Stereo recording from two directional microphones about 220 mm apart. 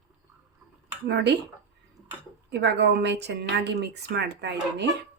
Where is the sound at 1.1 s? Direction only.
50° right (ahead or behind).